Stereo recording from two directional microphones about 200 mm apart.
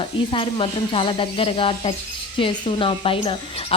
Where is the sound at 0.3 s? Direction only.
25° left (ahead or behind).